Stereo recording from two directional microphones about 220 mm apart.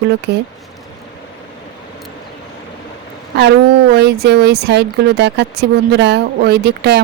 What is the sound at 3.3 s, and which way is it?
Speech, 50° right (ahead or behind).